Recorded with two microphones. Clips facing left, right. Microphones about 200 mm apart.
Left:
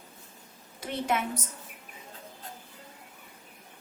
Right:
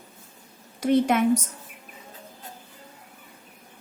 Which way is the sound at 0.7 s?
80° right.